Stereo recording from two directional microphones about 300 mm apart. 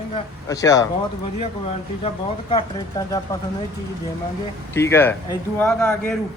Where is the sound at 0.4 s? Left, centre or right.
Centre.